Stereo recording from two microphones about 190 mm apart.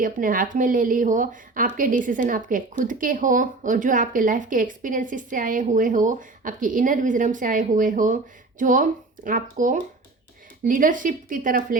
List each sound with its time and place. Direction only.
0.0 s speech: 45° right (ahead or behind)